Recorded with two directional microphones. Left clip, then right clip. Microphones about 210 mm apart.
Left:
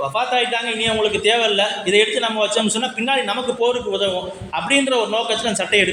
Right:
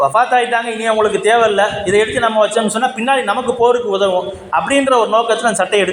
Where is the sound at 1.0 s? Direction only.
Centre (ahead or behind).